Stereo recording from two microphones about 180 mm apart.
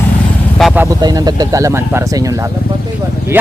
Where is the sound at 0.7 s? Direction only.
15° right (ahead or behind).